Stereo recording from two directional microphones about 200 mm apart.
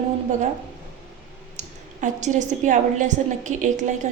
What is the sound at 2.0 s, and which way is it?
A woman's voice, 40° right (ahead or behind).